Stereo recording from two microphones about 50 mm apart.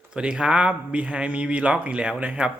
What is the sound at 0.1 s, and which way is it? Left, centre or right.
Speech, centre.